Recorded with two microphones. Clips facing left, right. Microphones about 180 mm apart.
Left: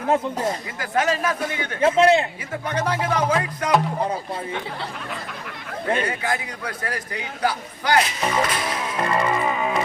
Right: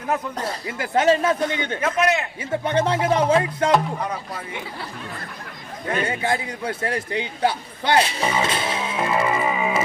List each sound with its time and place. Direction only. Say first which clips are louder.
0.8 s a man's voice: right 5 dB; 25° right (ahead or behind)
2.0 s speech: left 5 dB; 30° left (ahead or behind)
2.5 s a man's voice: right 6 dB; 25° right (ahead or behind)
6.1 s a man's voice: right 2 dB; 25° right (ahead or behind)
8.2 s speech: even; 5° right (ahead or behind)
8.4 s music: right 1 dB; 25° right (ahead or behind)
8.8 s music: even; 5° right (ahead or behind)